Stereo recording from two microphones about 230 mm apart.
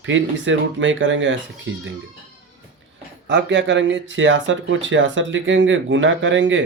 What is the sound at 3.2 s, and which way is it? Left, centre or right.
Speech, right.